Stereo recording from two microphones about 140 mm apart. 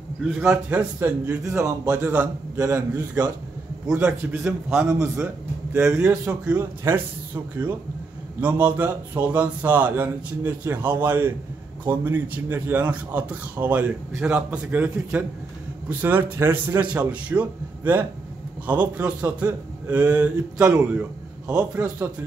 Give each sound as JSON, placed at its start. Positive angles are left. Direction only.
{"t": 0.2, "sound": "a man's voice", "side_deg": -10}
{"t": 8.4, "sound": "a man's voice", "side_deg": -10}